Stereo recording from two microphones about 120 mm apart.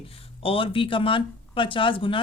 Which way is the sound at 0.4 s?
50° left (ahead or behind).